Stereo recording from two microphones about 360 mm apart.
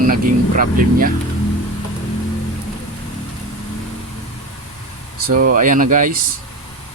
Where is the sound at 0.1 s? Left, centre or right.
Right.